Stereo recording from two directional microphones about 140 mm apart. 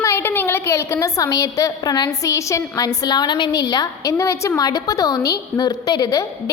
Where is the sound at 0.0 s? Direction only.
20° left (ahead or behind).